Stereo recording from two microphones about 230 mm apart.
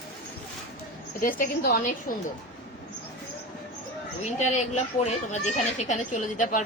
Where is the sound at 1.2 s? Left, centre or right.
Left.